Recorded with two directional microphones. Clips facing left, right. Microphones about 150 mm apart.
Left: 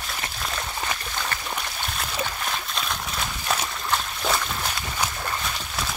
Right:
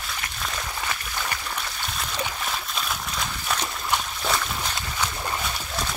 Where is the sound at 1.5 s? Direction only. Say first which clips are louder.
Left 1 dB; centre (ahead or behind).